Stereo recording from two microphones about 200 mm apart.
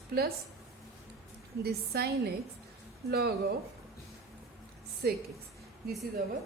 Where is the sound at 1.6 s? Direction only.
50° right (ahead or behind).